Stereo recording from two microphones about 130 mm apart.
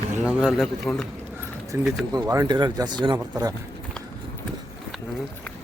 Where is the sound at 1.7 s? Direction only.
25° right (ahead or behind).